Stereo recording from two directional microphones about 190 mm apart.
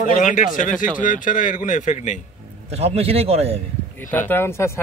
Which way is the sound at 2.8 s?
30° right (ahead or behind).